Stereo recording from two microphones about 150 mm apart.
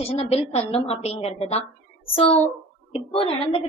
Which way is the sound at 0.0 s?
40° left (ahead or behind).